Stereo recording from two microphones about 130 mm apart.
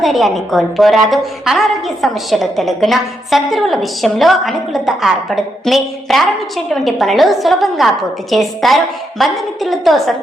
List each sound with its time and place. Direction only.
0.0 s a woman's voice: centre (ahead or behind)